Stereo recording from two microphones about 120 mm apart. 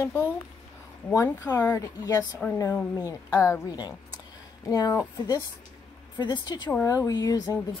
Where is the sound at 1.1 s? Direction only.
25° left (ahead or behind).